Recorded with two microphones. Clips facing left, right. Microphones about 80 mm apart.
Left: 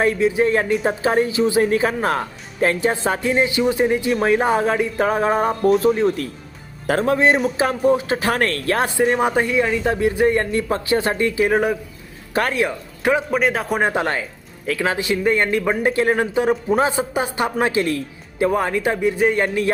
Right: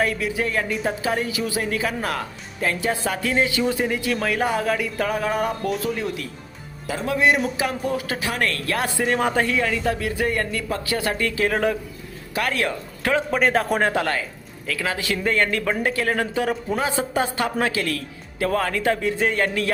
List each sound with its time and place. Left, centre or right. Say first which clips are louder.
0.0 s speech: left 6 dB; left
6.8 s speech: left 4 dB; left
8.2 s speech: left 5 dB; left
9.1 s speech: left 3 dB; centre
12.3 s speech: left 4 dB; left
12.5 s speech: left 3 dB; centre
13.3 s speech: even; centre
13.8 s speech: left 2 dB; left